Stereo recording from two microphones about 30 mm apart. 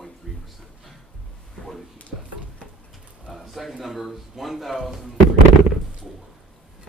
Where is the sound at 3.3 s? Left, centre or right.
Centre.